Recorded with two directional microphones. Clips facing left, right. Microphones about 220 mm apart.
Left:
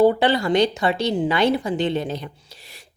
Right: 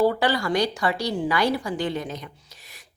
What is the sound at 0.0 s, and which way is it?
A woman's voice, 20° left (ahead or behind).